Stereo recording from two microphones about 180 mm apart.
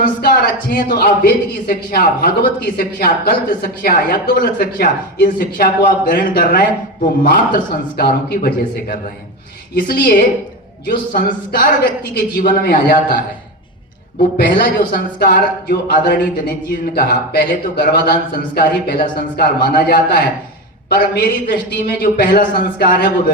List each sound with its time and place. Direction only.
0.0 s speech: 50° left (ahead or behind)
14.3 s a man's voice: 55° left (ahead or behind)